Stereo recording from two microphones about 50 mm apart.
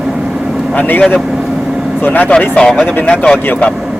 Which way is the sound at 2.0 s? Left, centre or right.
Left.